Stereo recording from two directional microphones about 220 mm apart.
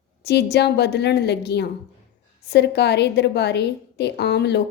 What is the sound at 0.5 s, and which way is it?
A woman's voice, 50° left (ahead or behind).